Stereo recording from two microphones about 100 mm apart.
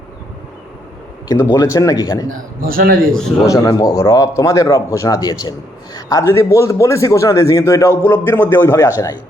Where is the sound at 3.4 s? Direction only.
35° left (ahead or behind).